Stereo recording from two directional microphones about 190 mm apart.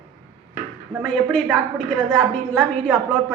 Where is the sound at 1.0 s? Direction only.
5° left (ahead or behind).